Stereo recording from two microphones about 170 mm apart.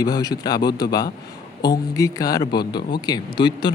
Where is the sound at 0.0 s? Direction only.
25° left (ahead or behind).